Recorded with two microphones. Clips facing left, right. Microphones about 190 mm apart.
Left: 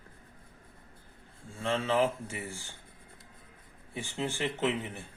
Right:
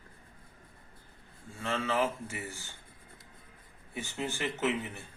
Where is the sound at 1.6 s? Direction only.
30° left (ahead or behind).